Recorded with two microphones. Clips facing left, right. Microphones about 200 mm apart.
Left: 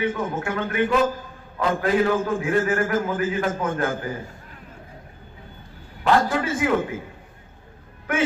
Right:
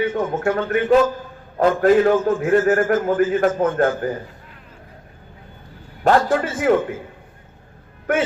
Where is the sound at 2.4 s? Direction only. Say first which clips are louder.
Right 6 dB; 50° right (ahead or behind).